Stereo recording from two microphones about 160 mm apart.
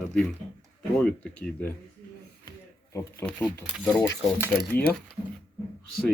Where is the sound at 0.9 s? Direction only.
10° left (ahead or behind).